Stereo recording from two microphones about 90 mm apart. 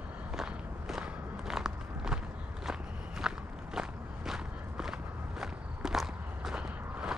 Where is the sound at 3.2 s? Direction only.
5° right (ahead or behind).